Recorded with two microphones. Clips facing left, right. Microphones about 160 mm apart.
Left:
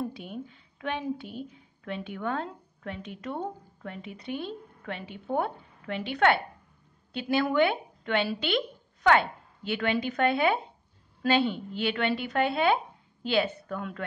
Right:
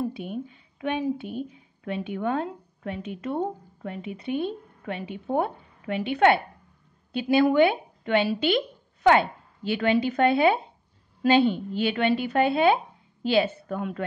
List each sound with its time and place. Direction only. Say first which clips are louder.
0.1 s a woman's voice: right 6 dB; 15° right (ahead or behind)